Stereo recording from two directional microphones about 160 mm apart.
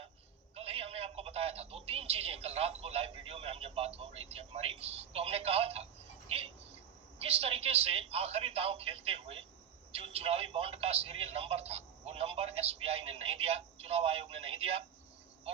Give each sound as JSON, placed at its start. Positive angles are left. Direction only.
{"t": 0.5, "sound": "a man's voice", "side_deg": -40}